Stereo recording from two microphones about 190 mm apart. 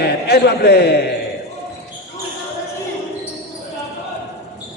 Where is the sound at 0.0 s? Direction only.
55° left (ahead or behind).